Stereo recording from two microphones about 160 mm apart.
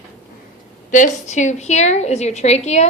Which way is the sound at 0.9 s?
50° left (ahead or behind).